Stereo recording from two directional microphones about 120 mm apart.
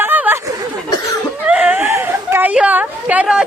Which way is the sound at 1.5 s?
10° right (ahead or behind).